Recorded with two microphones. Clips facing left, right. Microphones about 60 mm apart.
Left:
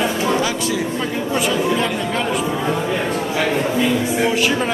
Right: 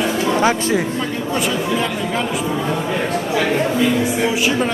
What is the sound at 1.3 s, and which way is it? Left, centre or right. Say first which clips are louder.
Speech: left 2 dB; centre.